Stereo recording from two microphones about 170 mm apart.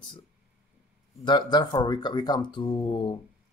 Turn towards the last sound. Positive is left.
turn(degrees=30)  # may be behind; listen again after turning